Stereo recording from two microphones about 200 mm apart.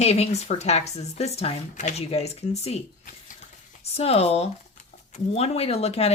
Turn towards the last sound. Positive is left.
turn(degrees=30)  # may be behind; listen again after turning